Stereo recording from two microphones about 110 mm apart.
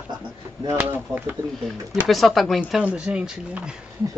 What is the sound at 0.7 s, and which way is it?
Speech, 15° right (ahead or behind).